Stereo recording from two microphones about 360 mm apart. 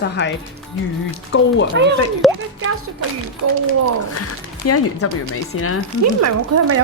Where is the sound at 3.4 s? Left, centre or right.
Right.